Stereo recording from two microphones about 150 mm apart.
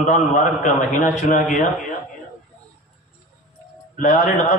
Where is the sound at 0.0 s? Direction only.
55° left (ahead or behind).